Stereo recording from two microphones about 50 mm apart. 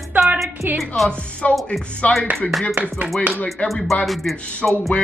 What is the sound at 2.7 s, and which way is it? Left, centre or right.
Music, right.